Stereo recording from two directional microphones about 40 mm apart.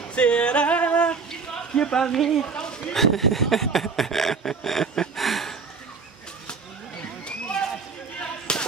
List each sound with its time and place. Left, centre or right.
0.1 s yodeling: left
1.8 s speech: centre
5.1 s a sound: centre
8.5 s basketball bounce: left